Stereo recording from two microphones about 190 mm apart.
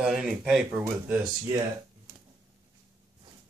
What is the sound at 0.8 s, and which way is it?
Speech, 15° right (ahead or behind).